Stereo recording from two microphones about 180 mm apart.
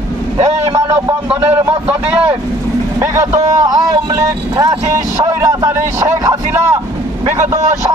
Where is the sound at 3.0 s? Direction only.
15° right (ahead or behind).